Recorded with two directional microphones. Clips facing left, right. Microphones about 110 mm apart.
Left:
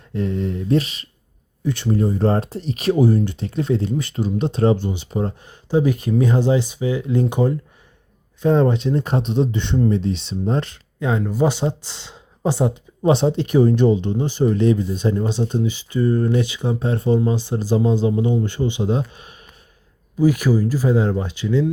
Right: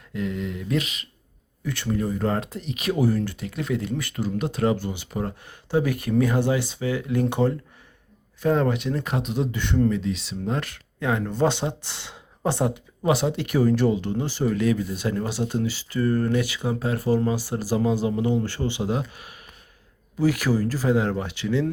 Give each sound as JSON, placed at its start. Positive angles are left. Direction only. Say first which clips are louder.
{"t": 0.1, "sound": "speech", "louder": "left 5 dB", "side_deg": 35}
{"t": 1.6, "sound": "speech", "louder": "left 6 dB", "side_deg": 25}
{"t": 11.2, "sound": "speech", "louder": "left 4 dB", "side_deg": 5}
{"t": 12.0, "sound": "a sound", "louder": "left 6 dB", "side_deg": -15}
{"t": 12.5, "sound": "speech", "louder": "left 4 dB", "side_deg": 20}